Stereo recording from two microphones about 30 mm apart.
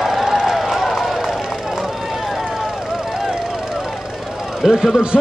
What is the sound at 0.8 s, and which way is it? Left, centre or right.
Run, centre.